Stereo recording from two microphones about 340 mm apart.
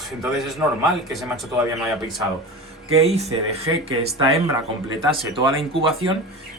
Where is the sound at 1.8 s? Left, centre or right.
Centre.